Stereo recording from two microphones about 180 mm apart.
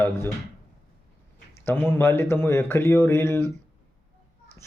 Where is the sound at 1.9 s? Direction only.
15° left (ahead or behind).